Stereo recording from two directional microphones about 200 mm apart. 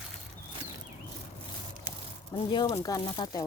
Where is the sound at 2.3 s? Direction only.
25° left (ahead or behind).